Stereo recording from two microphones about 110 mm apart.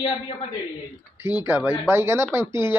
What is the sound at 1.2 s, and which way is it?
Speech, 20° right (ahead or behind).